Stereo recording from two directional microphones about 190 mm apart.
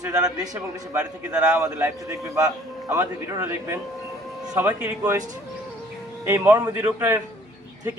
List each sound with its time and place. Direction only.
0.0 s a man's voice: 20° right (ahead or behind)
0.9 s a man's voice: 5° right (ahead or behind)
1.6 s a man's voice: 15° right (ahead or behind)
6.2 s a man's voice: 10° right (ahead or behind)